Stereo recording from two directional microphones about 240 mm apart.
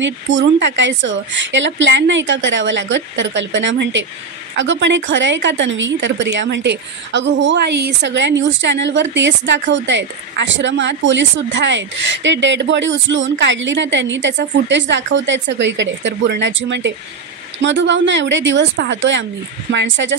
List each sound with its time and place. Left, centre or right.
0.0 s a woman's voice: right